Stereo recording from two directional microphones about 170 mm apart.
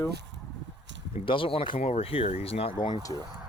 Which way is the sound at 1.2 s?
30° left (ahead or behind).